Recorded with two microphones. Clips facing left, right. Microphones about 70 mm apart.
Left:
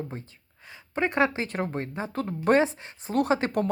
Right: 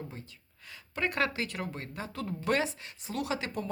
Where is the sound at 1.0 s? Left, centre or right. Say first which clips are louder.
Left 6 dB; left.